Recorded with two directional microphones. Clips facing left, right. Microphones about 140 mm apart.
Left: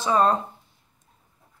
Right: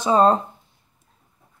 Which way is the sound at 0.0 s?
30° right (ahead or behind).